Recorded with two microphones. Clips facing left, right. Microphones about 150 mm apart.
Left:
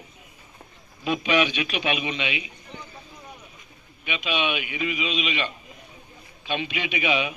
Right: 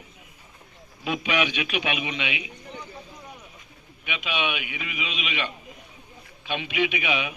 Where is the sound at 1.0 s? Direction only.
10° right (ahead or behind).